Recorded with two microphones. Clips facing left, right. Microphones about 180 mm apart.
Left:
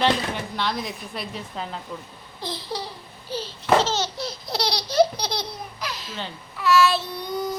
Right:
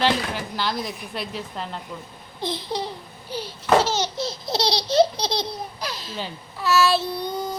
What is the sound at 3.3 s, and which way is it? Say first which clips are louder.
Speech: right 1 dB; 10° right (ahead or behind).